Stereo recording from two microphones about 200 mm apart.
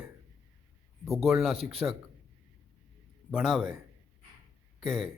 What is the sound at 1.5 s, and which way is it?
Speech, 30° right (ahead or behind).